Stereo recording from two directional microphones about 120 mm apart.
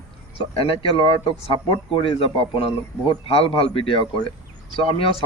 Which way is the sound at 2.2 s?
50° left (ahead or behind).